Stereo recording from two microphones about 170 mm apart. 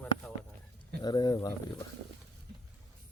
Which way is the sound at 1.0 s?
25° left (ahead or behind).